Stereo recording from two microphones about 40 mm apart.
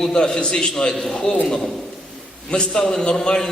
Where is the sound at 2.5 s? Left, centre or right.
Left.